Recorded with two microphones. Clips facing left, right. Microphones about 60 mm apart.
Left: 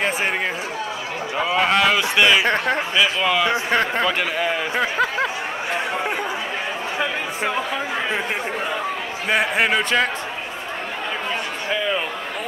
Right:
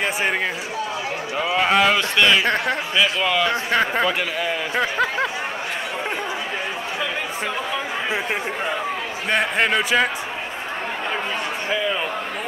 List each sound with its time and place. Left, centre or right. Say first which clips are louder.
1.6 s speech: right 1 dB; centre
2.0 s a man's voice: left 1 dB; centre
3.8 s speech: even; centre
9.3 s speech: left 1 dB; centre